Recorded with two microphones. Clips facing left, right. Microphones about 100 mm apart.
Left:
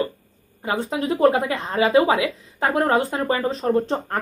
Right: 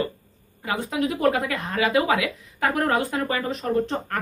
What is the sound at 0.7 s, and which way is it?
Speech, 30° left (ahead or behind).